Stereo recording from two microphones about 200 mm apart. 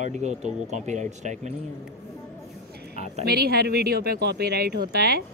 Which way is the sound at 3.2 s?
50° right (ahead or behind).